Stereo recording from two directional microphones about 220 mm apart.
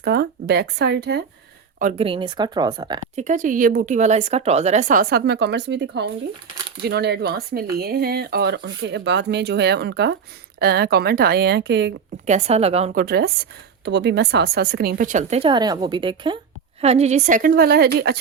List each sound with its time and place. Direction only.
0.0 s speech: 45° right (ahead or behind)
1.8 s speech: 30° right (ahead or behind)
3.2 s a woman's voice: 35° right (ahead or behind); by 11.9 s 50° right (ahead or behind)
12.2 s speech: 30° right (ahead or behind)
12.9 s a woman's voice: 45° right (ahead or behind)